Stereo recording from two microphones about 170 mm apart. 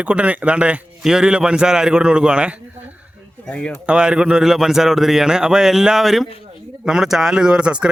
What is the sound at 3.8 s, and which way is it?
Speech, 5° right (ahead or behind).